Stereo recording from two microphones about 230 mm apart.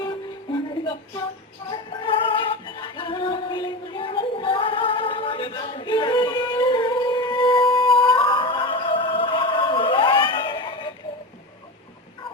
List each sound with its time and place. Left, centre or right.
0.0 s music: centre